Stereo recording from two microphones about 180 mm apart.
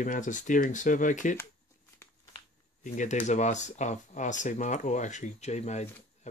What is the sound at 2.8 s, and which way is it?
Speech, 45° left (ahead or behind).